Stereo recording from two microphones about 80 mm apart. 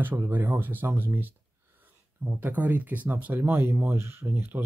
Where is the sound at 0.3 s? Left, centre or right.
Right.